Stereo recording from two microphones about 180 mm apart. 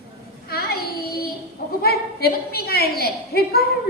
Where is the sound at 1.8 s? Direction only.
60° left (ahead or behind).